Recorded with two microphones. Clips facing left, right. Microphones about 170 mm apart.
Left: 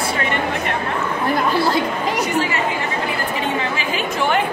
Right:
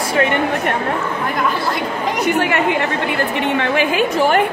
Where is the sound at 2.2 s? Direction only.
60° right (ahead or behind).